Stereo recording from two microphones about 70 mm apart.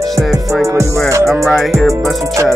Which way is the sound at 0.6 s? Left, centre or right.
Right.